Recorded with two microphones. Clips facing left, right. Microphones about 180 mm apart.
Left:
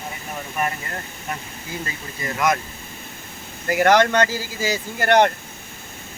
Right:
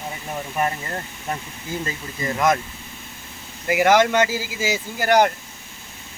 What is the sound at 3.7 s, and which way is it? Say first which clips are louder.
Speech: even; 5° right (ahead or behind).